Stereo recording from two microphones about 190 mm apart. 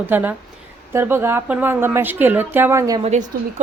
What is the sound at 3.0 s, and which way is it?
Speech, 35° right (ahead or behind).